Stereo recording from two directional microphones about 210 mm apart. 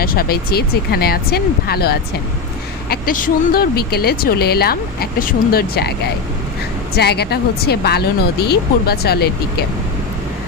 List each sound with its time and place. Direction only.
0.0 s speech: 45° left (ahead or behind)
6.9 s speech: 50° left (ahead or behind)